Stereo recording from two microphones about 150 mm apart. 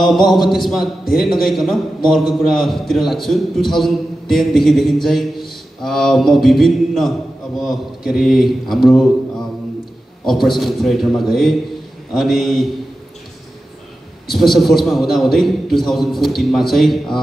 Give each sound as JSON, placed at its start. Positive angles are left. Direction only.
{"t": 0.0, "sound": "speech", "side_deg": 0}
{"t": 10.2, "sound": "speech", "side_deg": 0}
{"t": 14.3, "sound": "speech", "side_deg": 0}